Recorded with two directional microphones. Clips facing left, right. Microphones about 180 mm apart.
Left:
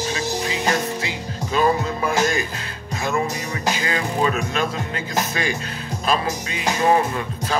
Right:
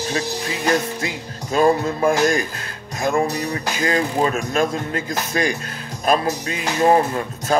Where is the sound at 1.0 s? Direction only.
45° right (ahead or behind).